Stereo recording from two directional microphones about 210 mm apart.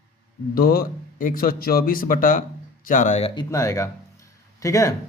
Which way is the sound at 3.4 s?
15° left (ahead or behind).